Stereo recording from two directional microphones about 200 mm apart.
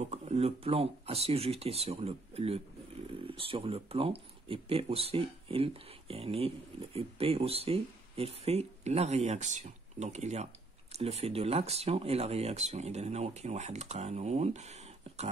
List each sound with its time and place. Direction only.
0.1 s speech: 35° right (ahead or behind)